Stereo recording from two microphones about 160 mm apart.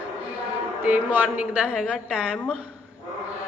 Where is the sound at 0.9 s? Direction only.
10° right (ahead or behind).